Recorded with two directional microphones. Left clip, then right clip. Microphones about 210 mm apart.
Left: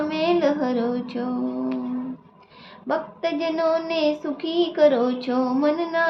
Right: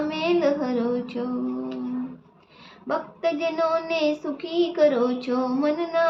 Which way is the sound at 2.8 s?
10° left (ahead or behind).